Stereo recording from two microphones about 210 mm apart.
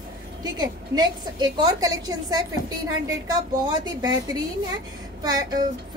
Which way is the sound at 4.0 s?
20° right (ahead or behind).